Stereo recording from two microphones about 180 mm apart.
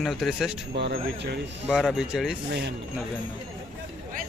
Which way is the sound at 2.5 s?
70° right (ahead or behind).